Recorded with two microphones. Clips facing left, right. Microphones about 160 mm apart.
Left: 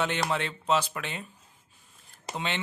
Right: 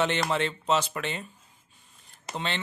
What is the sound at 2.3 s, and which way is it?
Speech, 10° left (ahead or behind).